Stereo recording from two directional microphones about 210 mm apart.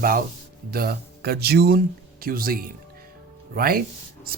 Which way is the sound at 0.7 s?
45° right (ahead or behind).